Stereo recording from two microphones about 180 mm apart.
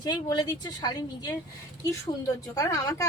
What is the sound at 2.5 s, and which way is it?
Speech, 20° left (ahead or behind).